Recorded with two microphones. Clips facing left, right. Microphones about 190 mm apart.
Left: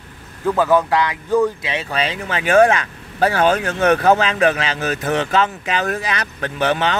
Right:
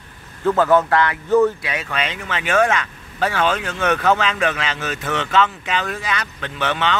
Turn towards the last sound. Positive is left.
turn(degrees=40)  # may be behind; listen again after turning